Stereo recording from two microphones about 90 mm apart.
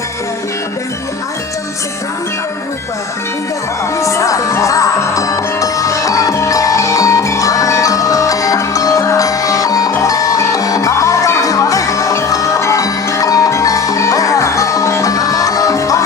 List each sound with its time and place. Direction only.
4.0 s music: 35° left (ahead or behind)